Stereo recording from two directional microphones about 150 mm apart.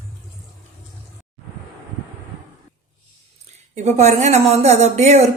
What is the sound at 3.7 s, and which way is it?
Speech, 50° right (ahead or behind).